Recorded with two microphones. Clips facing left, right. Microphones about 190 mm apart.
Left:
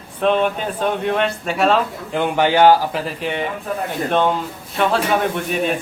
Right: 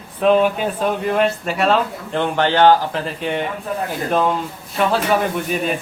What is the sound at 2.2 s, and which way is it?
A man's voice, 10° left (ahead or behind).